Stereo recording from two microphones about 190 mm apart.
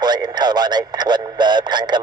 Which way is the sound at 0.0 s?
20° right (ahead or behind).